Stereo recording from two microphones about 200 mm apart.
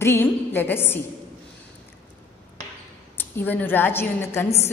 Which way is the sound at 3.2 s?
10° left (ahead or behind).